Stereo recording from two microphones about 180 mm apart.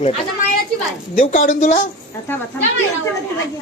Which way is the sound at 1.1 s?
50° left (ahead or behind).